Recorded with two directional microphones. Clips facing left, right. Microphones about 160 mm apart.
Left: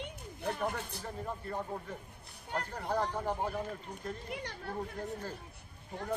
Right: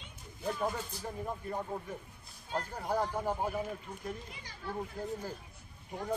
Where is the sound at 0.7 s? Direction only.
60° left (ahead or behind).